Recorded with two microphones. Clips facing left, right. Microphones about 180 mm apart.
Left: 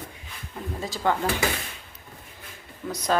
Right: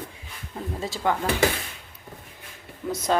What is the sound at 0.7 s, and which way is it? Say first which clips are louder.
Speech: right 1 dB; 25° right (ahead or behind).